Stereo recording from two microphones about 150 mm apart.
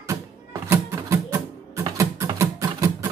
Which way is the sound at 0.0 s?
20° right (ahead or behind).